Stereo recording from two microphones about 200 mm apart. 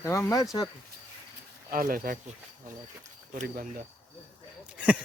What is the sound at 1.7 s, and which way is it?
Speech, 45° right (ahead or behind).